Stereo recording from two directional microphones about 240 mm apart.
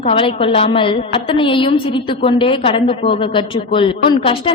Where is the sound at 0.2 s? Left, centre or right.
Left.